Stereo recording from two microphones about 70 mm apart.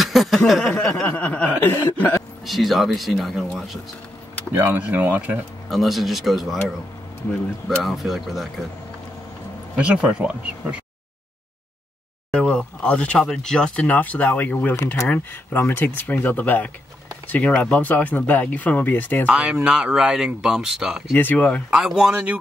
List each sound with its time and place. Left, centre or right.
0.0 s a sound: centre
0.7 s speech: centre
1.0 s chuckle: centre
2.4 s speech: centre
4.6 s speech: right
5.7 s speech: centre
7.8 s speech: centre
9.8 s speech: centre
12.3 s speech: centre
17.8 s speech: left
19.2 s speech: centre
21.1 s speech: left
21.6 s speech: centre